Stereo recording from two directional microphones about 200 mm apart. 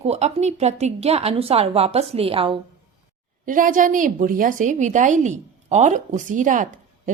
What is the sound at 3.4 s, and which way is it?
A woman's voice, 40° right (ahead or behind).